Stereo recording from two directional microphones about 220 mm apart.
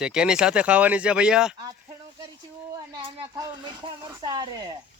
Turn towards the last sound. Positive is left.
turn(degrees=-20)  # may be behind; listen again after turning